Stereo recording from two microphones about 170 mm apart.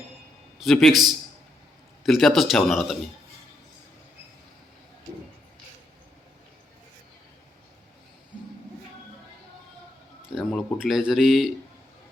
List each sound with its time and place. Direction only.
0.6 s speech: centre (ahead or behind)
10.2 s speech: 5° right (ahead or behind)